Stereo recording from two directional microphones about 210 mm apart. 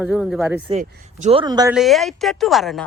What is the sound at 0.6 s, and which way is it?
Speech, 35° right (ahead or behind).